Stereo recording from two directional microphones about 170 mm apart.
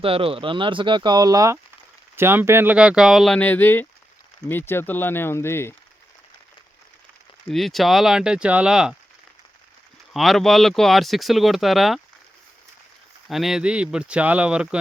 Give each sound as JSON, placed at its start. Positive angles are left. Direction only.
{"t": 0.0, "sound": "speech", "side_deg": -35}
{"t": 7.4, "sound": "speech", "side_deg": 0}
{"t": 10.1, "sound": "speech", "side_deg": 0}
{"t": 13.2, "sound": "speech", "side_deg": 0}